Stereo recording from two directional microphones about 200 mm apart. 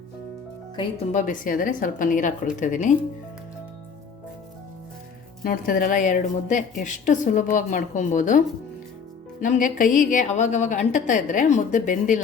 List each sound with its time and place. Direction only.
0.8 s a woman's voice: 35° left (ahead or behind)
5.4 s a woman's voice: 45° left (ahead or behind)